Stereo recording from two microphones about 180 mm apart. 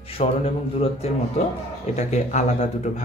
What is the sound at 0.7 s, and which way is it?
Speech, 35° left (ahead or behind).